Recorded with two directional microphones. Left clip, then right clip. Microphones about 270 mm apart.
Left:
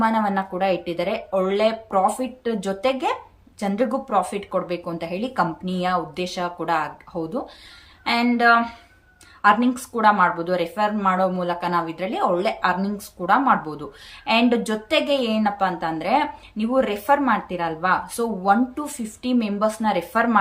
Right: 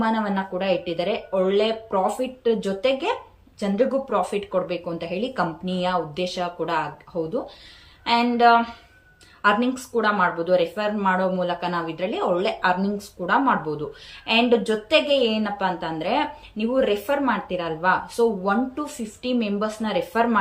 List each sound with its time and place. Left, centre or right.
0.0 s a woman's voice: centre